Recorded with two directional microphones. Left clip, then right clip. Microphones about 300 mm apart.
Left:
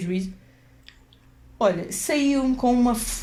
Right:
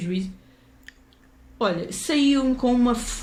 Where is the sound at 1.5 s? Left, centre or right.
Centre.